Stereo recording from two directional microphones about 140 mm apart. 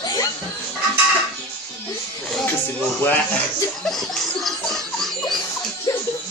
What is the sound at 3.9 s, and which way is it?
Baby laughter, centre (ahead or behind).